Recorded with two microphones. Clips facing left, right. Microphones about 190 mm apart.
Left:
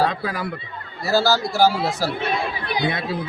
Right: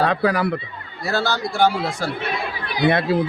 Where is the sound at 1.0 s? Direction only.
5° left (ahead or behind).